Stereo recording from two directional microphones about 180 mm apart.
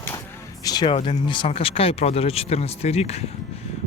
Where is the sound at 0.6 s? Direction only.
20° left (ahead or behind).